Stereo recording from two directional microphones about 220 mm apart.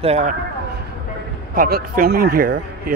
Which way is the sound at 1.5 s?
40° right (ahead or behind).